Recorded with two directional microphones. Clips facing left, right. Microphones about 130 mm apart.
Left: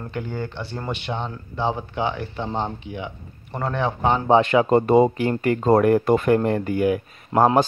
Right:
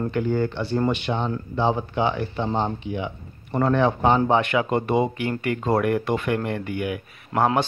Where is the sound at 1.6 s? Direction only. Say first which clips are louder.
Right 2 dB; 25° right (ahead or behind).